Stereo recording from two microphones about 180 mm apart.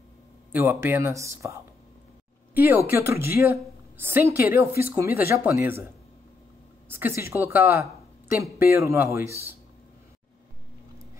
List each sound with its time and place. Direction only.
0.5 s a woman's voice: 15° right (ahead or behind)
6.9 s a woman's voice: 15° right (ahead or behind)